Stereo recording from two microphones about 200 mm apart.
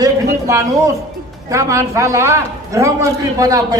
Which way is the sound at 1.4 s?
15° right (ahead or behind).